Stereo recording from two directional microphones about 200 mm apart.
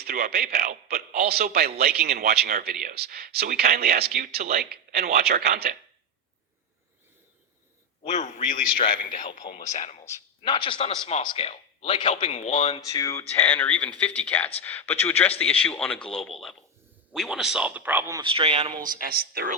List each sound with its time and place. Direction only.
0.0 s speech: 50° right (ahead or behind)
8.0 s a man's voice: 35° left (ahead or behind)
12.8 s speech: 15° left (ahead or behind); by 18.2 s 10° right (ahead or behind)
18.2 s a man's voice: 25° right (ahead or behind)
18.8 s speech: 45° right (ahead or behind)